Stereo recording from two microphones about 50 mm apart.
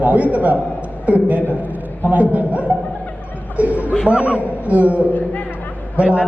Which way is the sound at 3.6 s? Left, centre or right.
Right.